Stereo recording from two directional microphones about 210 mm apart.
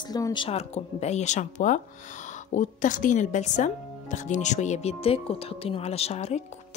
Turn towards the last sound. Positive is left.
turn(degrees=30)  # may be behind; listen again after turning